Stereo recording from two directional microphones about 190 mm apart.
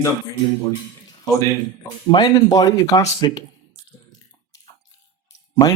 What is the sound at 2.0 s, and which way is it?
Speech, 25° left (ahead or behind).